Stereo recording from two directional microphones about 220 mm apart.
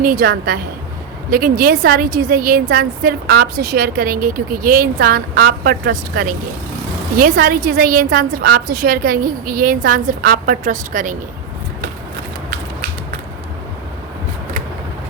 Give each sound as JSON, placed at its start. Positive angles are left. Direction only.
{"t": 0.0, "sound": "a woman's voice", "side_deg": -40}